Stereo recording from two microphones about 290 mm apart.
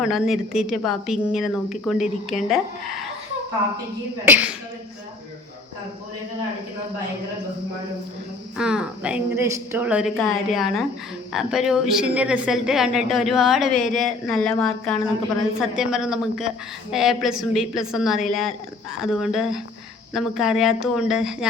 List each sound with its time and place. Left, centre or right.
0.0 s a woman's voice: centre
4.3 s a woman's voice: centre
8.5 s a woman's voice: centre